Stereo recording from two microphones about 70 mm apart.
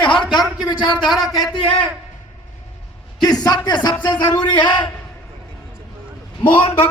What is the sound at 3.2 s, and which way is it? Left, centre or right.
Speech, left.